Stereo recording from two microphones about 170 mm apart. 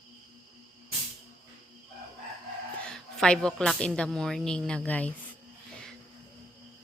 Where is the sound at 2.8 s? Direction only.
5° left (ahead or behind).